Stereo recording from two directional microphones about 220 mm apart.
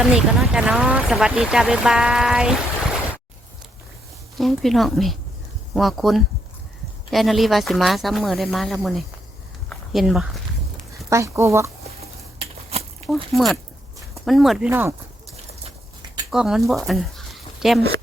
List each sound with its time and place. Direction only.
0.0 s speech: centre (ahead or behind)
4.4 s speech: centre (ahead or behind)
9.6 s a sound: centre (ahead or behind)
11.1 s speech: 15° right (ahead or behind)
13.3 s speech: centre (ahead or behind)
14.7 s speech: 10° right (ahead or behind)
16.3 s speech: centre (ahead or behind)